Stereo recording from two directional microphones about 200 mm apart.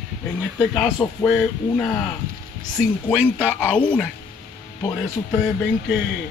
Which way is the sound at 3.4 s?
5° left (ahead or behind).